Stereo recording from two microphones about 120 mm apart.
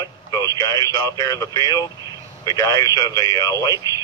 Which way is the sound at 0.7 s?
30° left (ahead or behind).